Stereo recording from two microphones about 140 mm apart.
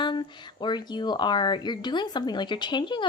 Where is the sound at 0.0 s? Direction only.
35° left (ahead or behind).